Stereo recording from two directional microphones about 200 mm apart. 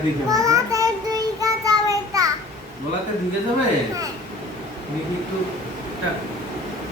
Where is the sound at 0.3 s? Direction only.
15° right (ahead or behind).